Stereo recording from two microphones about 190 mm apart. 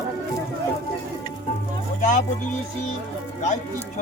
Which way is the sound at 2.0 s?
40° left (ahead or behind).